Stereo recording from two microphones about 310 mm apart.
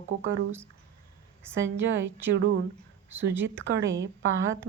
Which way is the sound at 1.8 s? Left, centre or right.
Right.